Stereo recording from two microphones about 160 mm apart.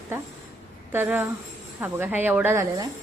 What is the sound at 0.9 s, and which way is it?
A woman's voice, 10° right (ahead or behind).